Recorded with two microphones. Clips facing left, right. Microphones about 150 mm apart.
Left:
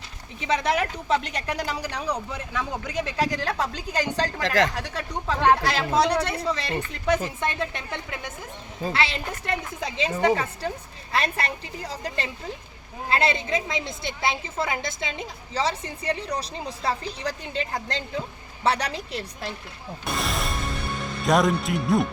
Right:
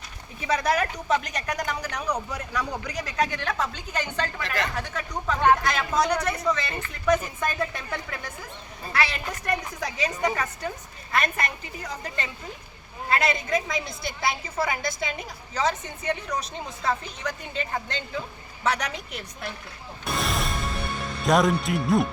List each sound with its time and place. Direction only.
0.3 s a woman's voice: 25° left (ahead or behind)
4.4 s speech: 90° left
4.8 s a woman's voice: 30° left (ahead or behind)
20.1 s music: centre (ahead or behind)
21.2 s speech: centre (ahead or behind)